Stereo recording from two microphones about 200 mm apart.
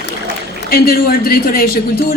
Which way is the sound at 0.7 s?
50° left (ahead or behind).